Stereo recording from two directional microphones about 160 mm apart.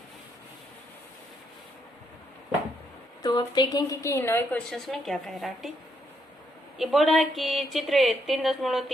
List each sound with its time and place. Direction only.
3.2 s a woman's voice: 25° left (ahead or behind)
4.7 s speech: centre (ahead or behind)
6.7 s speech: centre (ahead or behind)